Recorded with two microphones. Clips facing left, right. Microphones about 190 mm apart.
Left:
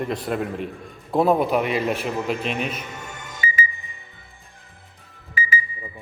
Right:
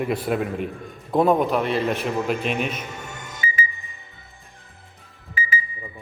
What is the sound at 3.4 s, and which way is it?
Alarm clock, 65° left (ahead or behind).